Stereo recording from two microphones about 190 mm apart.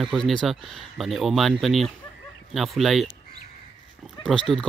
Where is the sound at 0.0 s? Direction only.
Centre (ahead or behind).